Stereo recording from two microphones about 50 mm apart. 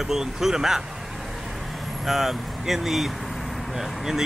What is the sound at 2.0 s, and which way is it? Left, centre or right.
Speech, centre.